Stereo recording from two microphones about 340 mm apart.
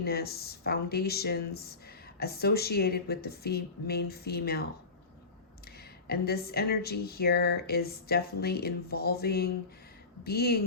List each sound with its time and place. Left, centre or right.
0.0 s speech: left
6.1 s speech: left